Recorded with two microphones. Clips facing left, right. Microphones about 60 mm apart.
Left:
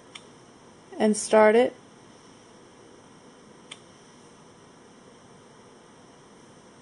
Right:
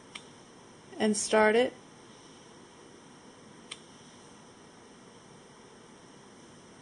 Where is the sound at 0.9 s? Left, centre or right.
Left.